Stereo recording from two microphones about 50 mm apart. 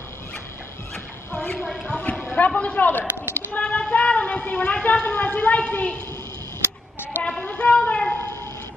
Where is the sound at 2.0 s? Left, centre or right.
Left.